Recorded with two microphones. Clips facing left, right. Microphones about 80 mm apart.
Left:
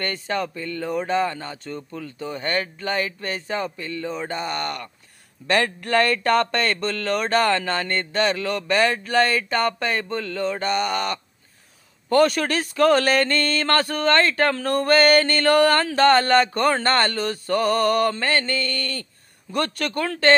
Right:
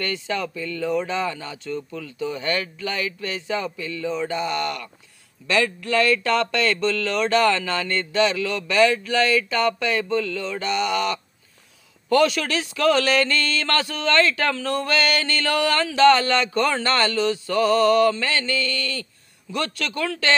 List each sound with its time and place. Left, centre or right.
0.0 s speech: left